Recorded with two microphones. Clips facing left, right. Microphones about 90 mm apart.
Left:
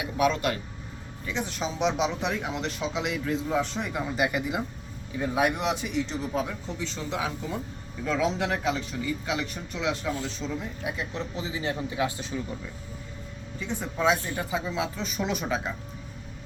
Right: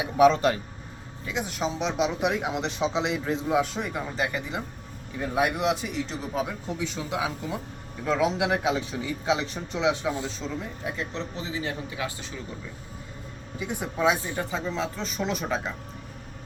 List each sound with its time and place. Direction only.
0.0 s speech: 30° right (ahead or behind)
1.3 s speech: 5° right (ahead or behind)
2.3 s a man's voice: 15° right (ahead or behind)
3.5 s a man's voice: 5° right (ahead or behind)
10.9 s speech: 15° left (ahead or behind)
13.6 s speech: 15° right (ahead or behind)
14.3 s speech: 5° left (ahead or behind)